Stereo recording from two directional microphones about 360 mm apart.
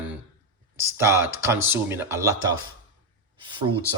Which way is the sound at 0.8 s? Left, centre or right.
Centre.